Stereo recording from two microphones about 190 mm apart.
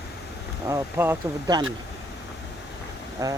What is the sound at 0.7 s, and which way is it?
Speech, 15° right (ahead or behind).